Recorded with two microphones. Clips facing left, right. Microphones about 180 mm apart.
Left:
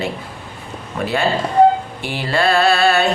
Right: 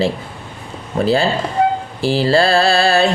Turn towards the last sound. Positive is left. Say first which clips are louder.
# right 1 dB
turn(degrees=-30)  # may be behind; listen again after turning